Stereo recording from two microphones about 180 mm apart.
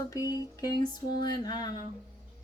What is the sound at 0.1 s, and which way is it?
Speech, 20° left (ahead or behind).